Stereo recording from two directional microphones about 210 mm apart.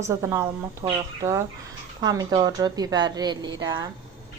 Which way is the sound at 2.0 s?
20° right (ahead or behind).